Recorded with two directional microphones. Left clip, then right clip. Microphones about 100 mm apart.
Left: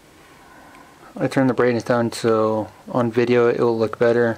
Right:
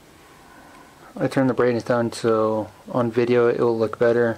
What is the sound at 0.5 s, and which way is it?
Speech, 10° left (ahead or behind).